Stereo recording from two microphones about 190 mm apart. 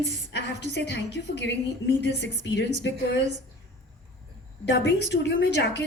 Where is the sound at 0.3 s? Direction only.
65° left (ahead or behind).